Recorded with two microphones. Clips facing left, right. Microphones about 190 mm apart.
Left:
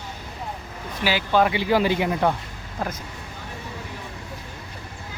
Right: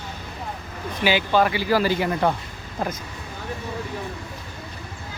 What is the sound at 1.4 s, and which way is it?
Speech, 20° left (ahead or behind).